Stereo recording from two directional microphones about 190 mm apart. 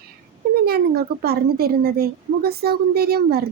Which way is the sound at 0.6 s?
55° right (ahead or behind).